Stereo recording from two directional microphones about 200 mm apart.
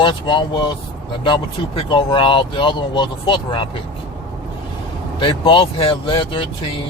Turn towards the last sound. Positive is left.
turn(degrees=25)  # may be behind; listen again after turning